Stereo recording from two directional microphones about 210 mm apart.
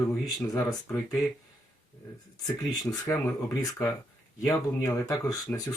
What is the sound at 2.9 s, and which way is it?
Speech, 10° left (ahead or behind).